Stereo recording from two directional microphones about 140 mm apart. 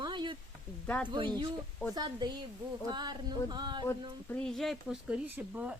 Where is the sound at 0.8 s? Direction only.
10° left (ahead or behind).